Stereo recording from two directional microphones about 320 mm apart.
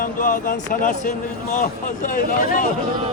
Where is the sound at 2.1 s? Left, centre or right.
Left.